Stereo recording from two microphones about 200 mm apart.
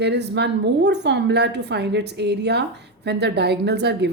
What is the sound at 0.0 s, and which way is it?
A woman's voice, 60° right (ahead or behind).